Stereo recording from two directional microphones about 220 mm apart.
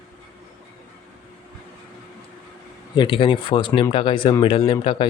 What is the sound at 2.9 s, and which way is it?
Speech, 20° left (ahead or behind).